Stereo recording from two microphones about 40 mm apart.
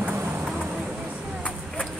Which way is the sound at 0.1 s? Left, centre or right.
Right.